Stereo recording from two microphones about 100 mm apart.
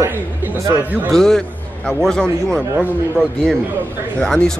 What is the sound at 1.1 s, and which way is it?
A man's voice, 5° left (ahead or behind).